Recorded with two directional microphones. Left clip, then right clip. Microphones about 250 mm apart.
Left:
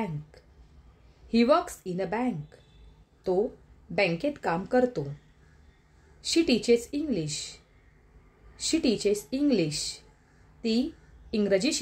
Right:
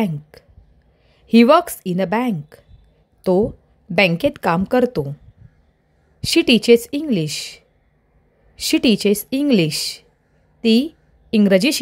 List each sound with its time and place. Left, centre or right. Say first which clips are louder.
0.3 s a sound: right 10 dB; right
1.3 s speech: right 11 dB; right
6.2 s a woman's voice: right 10 dB; right